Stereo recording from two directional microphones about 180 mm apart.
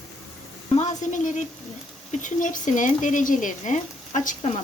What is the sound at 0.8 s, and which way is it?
A woman's voice, 40° left (ahead or behind).